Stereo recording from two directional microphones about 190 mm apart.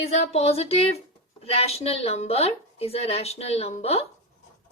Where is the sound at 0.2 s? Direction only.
35° left (ahead or behind).